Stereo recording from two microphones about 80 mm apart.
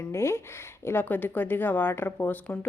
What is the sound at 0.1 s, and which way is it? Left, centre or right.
A woman's voice, left.